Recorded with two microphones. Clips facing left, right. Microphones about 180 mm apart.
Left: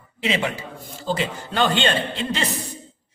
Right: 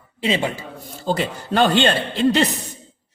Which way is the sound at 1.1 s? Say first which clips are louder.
Right 4 dB; 45° right (ahead or behind).